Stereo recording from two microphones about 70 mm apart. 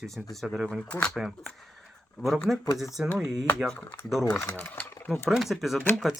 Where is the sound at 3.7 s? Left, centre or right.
Left.